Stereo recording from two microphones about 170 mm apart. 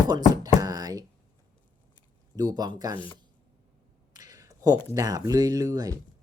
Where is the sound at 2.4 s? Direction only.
20° right (ahead or behind).